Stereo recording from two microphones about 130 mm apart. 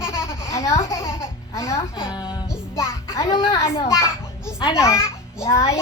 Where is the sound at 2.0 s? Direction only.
35° left (ahead or behind).